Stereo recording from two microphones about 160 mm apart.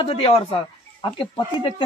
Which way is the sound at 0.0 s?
35° left (ahead or behind).